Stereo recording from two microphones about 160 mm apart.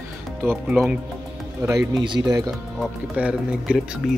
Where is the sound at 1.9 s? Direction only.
30° right (ahead or behind).